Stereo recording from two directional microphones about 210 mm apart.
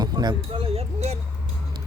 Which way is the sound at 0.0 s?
20° right (ahead or behind).